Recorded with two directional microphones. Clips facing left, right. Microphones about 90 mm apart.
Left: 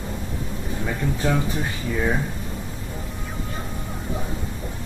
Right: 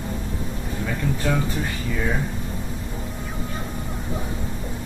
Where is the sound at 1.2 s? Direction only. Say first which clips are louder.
Left 1 dB; 25° left (ahead or behind).